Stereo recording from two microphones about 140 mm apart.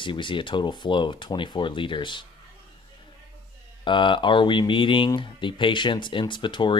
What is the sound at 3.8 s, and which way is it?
Speech, 35° left (ahead or behind).